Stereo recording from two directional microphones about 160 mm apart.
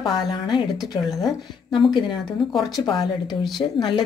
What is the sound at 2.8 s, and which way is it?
Speech, 30° left (ahead or behind).